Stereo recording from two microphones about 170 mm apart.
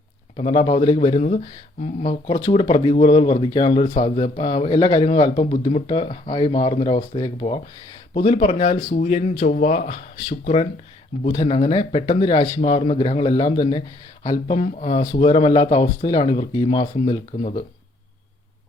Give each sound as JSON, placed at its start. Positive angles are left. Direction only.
{"t": 0.3, "sound": "speech", "side_deg": 35}
{"t": 5.0, "sound": "speech", "side_deg": 35}